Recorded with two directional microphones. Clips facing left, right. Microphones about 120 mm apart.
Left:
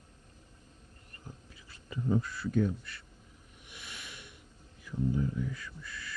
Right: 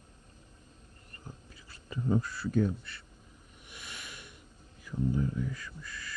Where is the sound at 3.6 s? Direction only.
45° right (ahead or behind).